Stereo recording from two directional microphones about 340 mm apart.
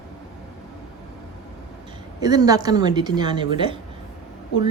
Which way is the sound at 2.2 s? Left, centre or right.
Centre.